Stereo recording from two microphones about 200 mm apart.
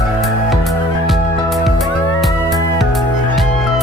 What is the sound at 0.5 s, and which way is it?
Music, centre (ahead or behind).